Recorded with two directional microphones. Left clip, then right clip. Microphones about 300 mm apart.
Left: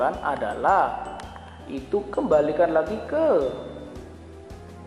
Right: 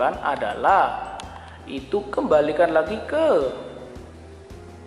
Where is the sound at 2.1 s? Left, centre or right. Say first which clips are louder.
Right 2 dB; centre.